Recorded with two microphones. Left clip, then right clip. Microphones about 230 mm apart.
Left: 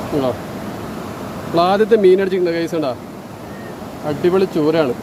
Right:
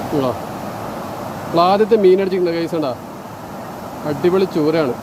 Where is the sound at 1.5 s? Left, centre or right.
Centre.